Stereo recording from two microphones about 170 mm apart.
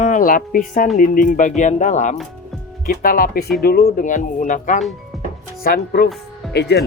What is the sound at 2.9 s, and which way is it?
Speech, 55° left (ahead or behind).